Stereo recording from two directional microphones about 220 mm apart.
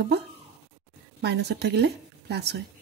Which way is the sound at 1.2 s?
50° right (ahead or behind).